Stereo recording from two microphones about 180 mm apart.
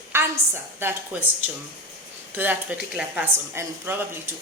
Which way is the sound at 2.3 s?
10° right (ahead or behind).